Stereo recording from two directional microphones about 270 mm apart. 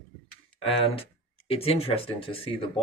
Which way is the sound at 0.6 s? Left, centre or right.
Centre.